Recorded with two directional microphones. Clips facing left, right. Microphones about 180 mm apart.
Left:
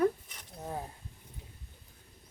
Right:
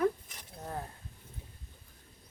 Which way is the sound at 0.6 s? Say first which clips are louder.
Left 1 dB; 10° left (ahead or behind).